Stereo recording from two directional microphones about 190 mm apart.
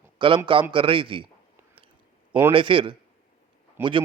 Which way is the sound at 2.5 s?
25° right (ahead or behind).